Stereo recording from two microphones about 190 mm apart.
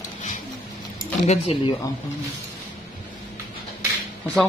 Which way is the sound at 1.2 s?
35° left (ahead or behind).